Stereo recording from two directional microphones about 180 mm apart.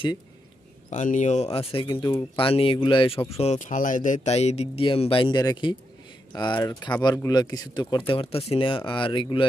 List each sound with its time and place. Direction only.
0.8 s speech: 45° left (ahead or behind); by 9.5 s 25° left (ahead or behind)